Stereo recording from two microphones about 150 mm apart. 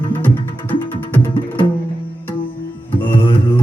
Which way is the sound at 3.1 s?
35° left (ahead or behind).